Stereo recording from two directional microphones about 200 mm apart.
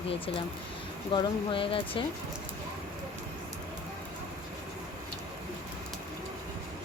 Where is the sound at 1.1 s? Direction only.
25° left (ahead or behind).